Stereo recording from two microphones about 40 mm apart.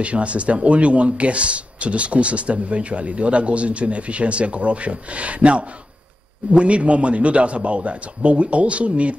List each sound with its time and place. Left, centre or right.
0.0 s speech: right